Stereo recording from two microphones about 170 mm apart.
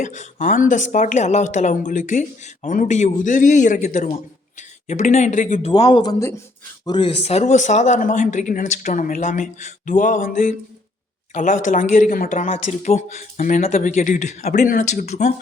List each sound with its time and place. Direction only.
0.0 s speech: 45° left (ahead or behind)
5.9 s speech: 25° left (ahead or behind)
7.2 s speech: 40° left (ahead or behind)